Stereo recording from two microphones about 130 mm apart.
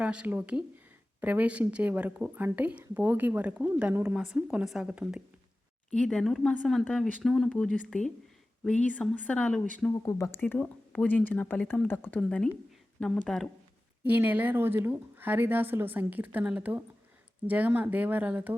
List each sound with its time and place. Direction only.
0.0 s speech: 10° right (ahead or behind)
5.9 s speech: 5° left (ahead or behind)
9.9 s speech: 25° left (ahead or behind)
10.4 s speech: 10° left (ahead or behind)
14.0 s speech: 15° right (ahead or behind)